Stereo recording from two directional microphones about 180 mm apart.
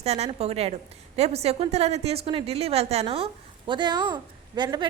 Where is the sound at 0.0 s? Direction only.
35° right (ahead or behind).